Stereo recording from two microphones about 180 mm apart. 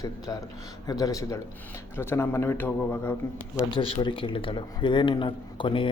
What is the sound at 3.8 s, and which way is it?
A man's voice, 30° left (ahead or behind).